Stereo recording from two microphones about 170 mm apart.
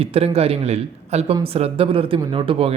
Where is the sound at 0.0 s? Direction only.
35° right (ahead or behind).